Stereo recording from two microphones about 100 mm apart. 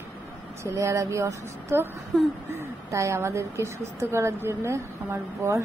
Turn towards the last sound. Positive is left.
turn(degrees=-30)  # may be behind; listen again after turning